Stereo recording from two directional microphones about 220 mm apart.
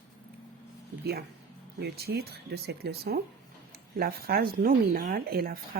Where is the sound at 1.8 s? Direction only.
45° right (ahead or behind).